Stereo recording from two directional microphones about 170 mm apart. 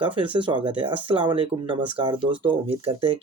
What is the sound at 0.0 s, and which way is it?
Speech, 30° right (ahead or behind).